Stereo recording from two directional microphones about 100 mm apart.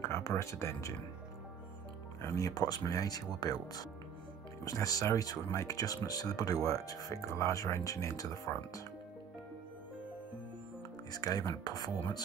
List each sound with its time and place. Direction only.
0.0 s speech: 25° left (ahead or behind)
2.2 s speech: 35° left (ahead or behind)
11.1 s speech: 40° left (ahead or behind)